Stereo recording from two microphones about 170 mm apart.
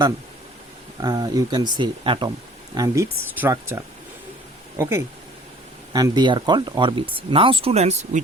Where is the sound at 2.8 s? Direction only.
15° right (ahead or behind).